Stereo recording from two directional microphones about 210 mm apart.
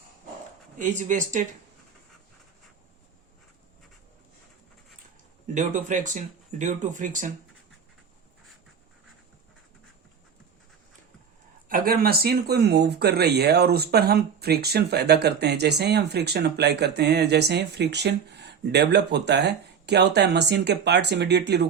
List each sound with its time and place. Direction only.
0.8 s speech: 35° right (ahead or behind)
5.5 s speech: 35° right (ahead or behind)
11.7 s speech: 45° right (ahead or behind)